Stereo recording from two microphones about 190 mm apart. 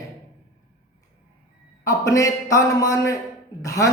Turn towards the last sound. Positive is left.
turn(degrees=15)  # may be behind; listen again after turning